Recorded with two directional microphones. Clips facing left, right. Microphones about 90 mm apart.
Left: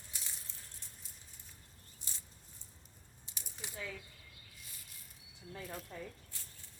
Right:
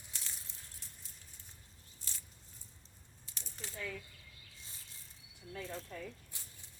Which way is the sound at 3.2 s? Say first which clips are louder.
Even; 10° left (ahead or behind).